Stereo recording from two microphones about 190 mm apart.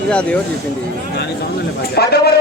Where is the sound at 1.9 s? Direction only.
55° left (ahead or behind).